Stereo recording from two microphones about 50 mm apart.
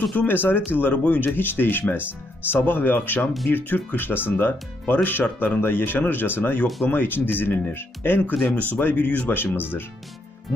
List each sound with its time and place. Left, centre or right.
0.3 s speech: left
8.5 s speech: left
9.6 s speech: left